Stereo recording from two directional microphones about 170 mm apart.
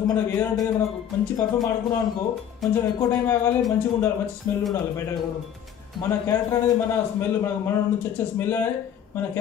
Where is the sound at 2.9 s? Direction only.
15° left (ahead or behind).